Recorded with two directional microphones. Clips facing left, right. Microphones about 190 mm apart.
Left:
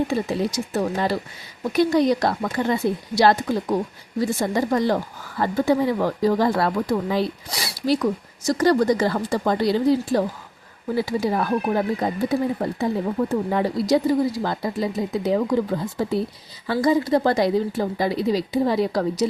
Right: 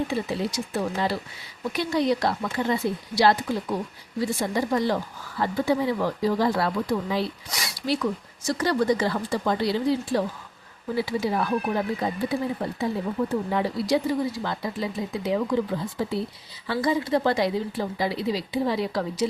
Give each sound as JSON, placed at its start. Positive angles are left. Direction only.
{"t": 0.1, "sound": "a woman's voice", "side_deg": 45}
{"t": 7.5, "sound": "a woman's voice", "side_deg": 35}